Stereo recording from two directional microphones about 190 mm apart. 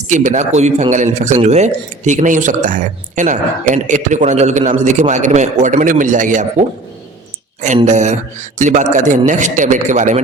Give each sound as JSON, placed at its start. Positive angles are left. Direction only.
{"t": 0.1, "sound": "speech", "side_deg": -40}
{"t": 7.9, "sound": "speech", "side_deg": -40}